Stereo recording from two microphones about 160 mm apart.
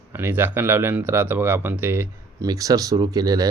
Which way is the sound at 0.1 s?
15° right (ahead or behind).